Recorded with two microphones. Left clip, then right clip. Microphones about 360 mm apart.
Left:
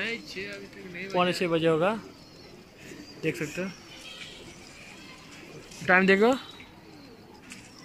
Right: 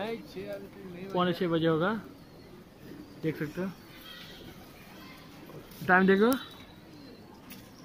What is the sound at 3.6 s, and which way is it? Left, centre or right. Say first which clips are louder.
Speech: left 3 dB; centre.